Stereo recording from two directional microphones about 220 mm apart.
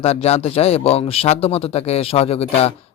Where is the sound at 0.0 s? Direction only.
30° left (ahead or behind).